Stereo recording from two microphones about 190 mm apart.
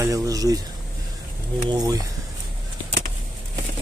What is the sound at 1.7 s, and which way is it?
Speech, 20° right (ahead or behind).